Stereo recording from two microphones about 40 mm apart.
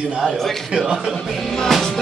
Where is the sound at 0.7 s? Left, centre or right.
Centre.